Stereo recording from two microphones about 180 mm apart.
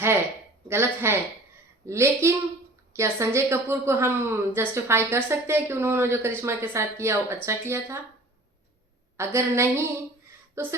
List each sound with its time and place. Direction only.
0.7 s a woman's voice: 15° right (ahead or behind)
9.1 s a woman's voice: 15° right (ahead or behind)